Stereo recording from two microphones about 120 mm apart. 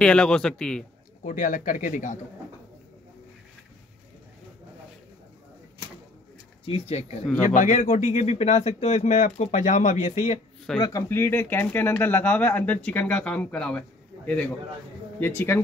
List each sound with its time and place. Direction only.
0.0 s speech: 5° left (ahead or behind)
1.2 s speech: 90° left
6.6 s speech: 55° left (ahead or behind)
7.4 s speech: 90° left
10.0 s speech: 75° left (ahead or behind)
10.8 s speech: 30° left (ahead or behind)